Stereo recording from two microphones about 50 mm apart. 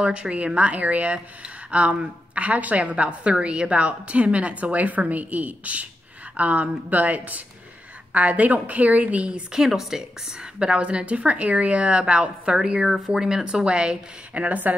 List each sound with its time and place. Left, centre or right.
0.0 s speech: right
9.5 s a woman's voice: centre; by 14.8 s right